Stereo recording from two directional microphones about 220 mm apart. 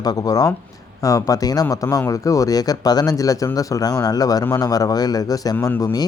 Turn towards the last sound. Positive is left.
turn(degrees=15)  # may be behind; listen again after turning